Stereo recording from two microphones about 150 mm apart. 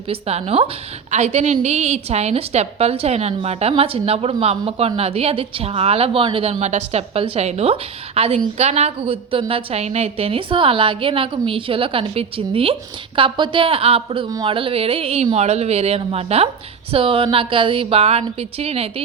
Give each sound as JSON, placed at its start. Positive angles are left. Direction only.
{"t": 0.1, "sound": "a woman's voice", "side_deg": -45}